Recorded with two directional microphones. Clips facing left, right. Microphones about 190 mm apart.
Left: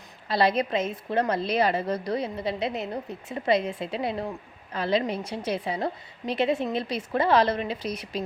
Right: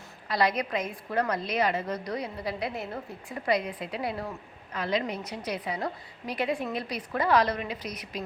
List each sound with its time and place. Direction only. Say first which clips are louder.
0.3 s a woman's voice: left 4 dB; 30° left (ahead or behind)